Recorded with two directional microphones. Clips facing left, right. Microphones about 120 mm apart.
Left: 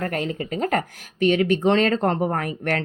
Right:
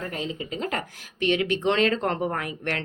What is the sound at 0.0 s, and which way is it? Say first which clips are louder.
Speech: left 6 dB; 60° left (ahead or behind).